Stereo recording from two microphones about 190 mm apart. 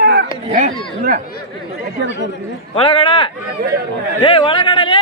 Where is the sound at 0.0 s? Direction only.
65° right (ahead or behind).